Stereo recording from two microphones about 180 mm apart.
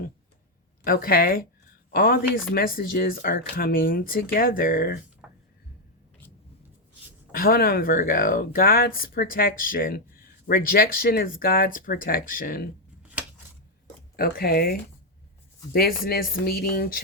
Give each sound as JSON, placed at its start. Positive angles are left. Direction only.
{"t": 0.9, "sound": "speech", "side_deg": 55}
{"t": 5.2, "sound": "a sound", "side_deg": -5}
{"t": 7.3, "sound": "speech", "side_deg": 55}
{"t": 14.2, "sound": "speech", "side_deg": 55}